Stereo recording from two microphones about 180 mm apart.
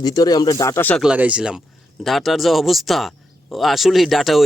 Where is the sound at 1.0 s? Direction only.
5° right (ahead or behind).